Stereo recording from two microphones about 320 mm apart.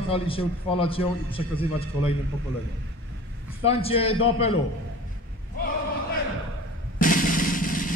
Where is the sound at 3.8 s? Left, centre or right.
Centre.